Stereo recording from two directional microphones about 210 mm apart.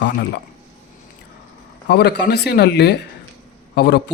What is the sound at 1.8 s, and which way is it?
A man's voice, 50° left (ahead or behind).